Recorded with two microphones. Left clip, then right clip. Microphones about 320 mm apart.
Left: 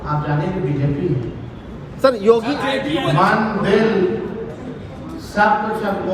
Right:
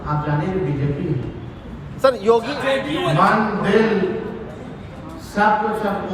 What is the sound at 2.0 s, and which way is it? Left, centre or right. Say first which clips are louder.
Speech: left 2 dB; right.